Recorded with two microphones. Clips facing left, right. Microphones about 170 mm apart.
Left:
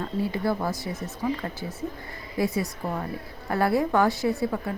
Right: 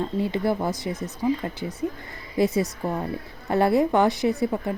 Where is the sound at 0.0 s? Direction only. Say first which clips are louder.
Right 3 dB; 20° right (ahead or behind).